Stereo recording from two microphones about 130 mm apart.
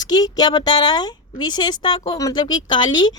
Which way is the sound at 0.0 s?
30° left (ahead or behind).